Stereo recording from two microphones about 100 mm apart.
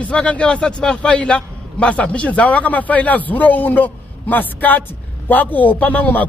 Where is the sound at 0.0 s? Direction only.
10° left (ahead or behind).